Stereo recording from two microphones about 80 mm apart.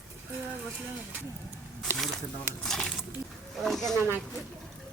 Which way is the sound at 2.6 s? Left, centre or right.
Centre.